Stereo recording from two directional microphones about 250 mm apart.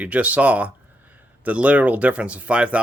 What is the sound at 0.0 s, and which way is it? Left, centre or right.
Speech, centre.